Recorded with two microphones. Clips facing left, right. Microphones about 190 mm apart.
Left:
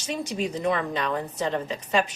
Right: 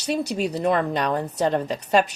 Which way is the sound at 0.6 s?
45° right (ahead or behind).